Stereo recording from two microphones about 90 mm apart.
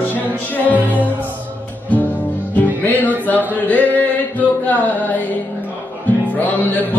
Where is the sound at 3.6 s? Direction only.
20° left (ahead or behind).